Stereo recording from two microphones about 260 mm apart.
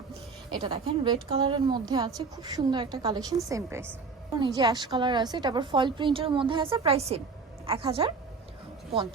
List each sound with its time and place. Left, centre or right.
0.5 s a woman's voice: centre